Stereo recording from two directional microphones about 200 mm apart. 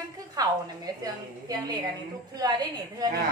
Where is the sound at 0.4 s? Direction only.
20° right (ahead or behind).